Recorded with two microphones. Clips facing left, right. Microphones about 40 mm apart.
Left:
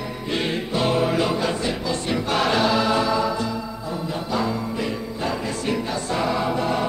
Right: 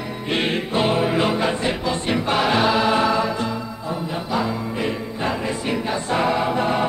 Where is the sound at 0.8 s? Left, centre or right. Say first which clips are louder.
Right 1 dB; right.